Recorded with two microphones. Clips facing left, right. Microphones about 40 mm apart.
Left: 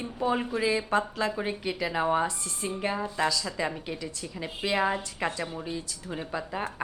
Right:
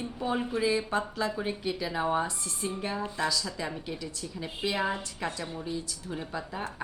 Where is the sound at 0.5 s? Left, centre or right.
Left.